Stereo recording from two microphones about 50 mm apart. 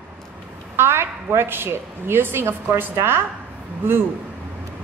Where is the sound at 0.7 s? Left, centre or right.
Right.